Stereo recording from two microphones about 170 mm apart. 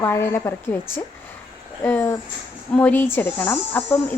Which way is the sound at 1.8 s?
10° left (ahead or behind).